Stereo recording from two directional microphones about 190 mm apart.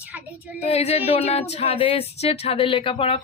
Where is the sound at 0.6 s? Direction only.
35° left (ahead or behind).